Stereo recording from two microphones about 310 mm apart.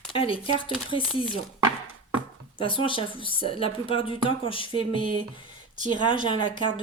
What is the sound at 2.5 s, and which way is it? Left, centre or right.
Speech, centre.